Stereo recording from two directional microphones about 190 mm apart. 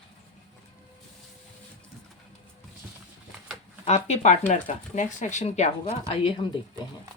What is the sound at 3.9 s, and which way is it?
Speech, 35° left (ahead or behind).